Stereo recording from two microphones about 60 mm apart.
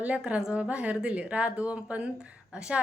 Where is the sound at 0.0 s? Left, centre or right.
Right.